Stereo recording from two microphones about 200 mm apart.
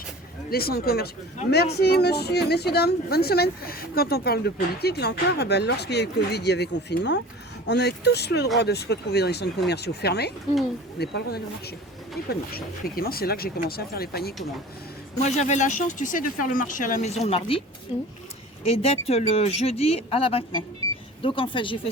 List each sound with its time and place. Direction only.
0.5 s speech: 50° left (ahead or behind)
15.2 s speech: 35° left (ahead or behind)
18.6 s speech: 30° left (ahead or behind)